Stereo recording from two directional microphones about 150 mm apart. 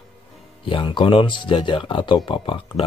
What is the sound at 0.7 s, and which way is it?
Speech, 35° left (ahead or behind).